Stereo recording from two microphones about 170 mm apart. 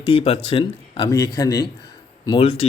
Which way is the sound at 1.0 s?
20° left (ahead or behind).